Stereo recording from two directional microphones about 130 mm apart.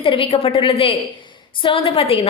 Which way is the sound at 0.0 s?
40° left (ahead or behind).